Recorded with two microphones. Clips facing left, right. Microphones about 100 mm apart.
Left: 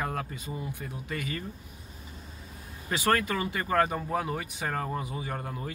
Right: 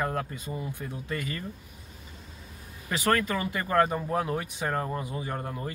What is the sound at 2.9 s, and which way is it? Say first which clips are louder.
Speech: right 1 dB; 10° left (ahead or behind).